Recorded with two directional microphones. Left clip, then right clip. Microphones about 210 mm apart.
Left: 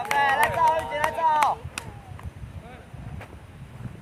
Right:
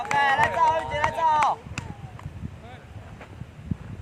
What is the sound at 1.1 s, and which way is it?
Chop, 25° right (ahead or behind).